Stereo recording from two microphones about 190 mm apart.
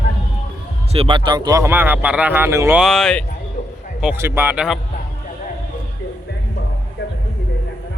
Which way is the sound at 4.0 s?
10° right (ahead or behind).